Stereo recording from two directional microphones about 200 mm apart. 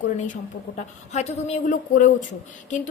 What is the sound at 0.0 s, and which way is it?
A woman's voice, 40° left (ahead or behind).